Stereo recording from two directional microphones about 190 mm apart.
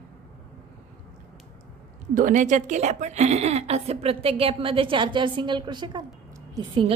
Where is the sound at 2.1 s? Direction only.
40° right (ahead or behind).